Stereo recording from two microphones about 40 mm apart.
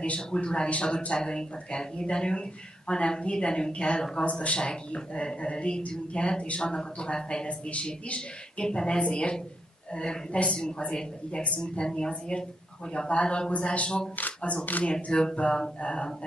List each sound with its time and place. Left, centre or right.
0.3 s a woman's voice: centre
14.4 s speech: left
14.9 s a woman's voice: left